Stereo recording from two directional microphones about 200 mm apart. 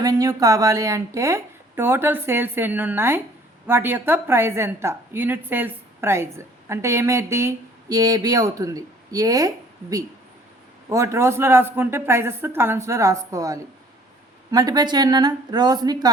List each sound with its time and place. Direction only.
0.0 s a woman's voice: 15° right (ahead or behind)
10.8 s a woman's voice: 15° right (ahead or behind)